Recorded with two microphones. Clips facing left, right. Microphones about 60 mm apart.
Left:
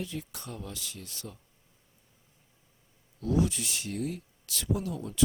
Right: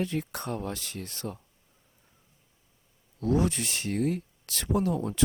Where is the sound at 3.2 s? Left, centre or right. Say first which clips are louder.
Right 2 dB; right.